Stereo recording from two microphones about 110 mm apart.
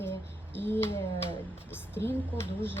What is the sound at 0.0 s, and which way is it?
Music, 20° left (ahead or behind).